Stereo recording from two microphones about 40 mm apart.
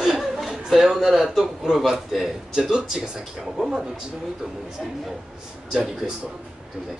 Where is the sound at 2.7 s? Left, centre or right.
Centre.